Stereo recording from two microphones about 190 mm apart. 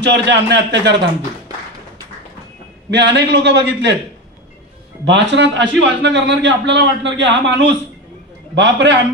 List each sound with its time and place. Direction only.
0.0 s a man's voice: 65° right (ahead or behind)
2.9 s a man's voice: 65° right (ahead or behind)
5.0 s a man's voice: 70° right (ahead or behind)